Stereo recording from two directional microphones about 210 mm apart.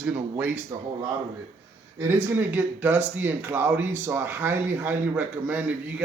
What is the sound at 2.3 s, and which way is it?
Speech, 10° right (ahead or behind).